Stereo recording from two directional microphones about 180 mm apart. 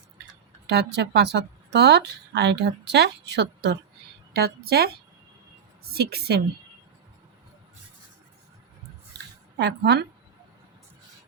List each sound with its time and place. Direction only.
0.7 s a woman's voice: 65° right (ahead or behind)
9.6 s a woman's voice: 65° right (ahead or behind)